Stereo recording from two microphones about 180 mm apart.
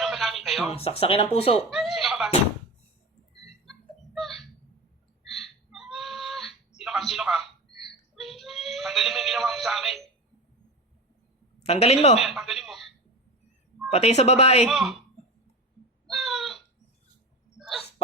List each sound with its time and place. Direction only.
0.0 s a sound: centre (ahead or behind)
0.7 s speech: 30° left (ahead or behind)
1.7 s chuckle: centre (ahead or behind)
3.7 s a sound: centre (ahead or behind)
11.6 s speech: 35° left (ahead or behind)
12.2 s speech: centre (ahead or behind)
13.9 s speech: 35° left (ahead or behind)
14.7 s speech: centre (ahead or behind)
16.0 s a sound: centre (ahead or behind)